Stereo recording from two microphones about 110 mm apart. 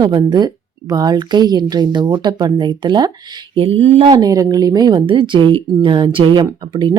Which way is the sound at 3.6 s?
60° right (ahead or behind).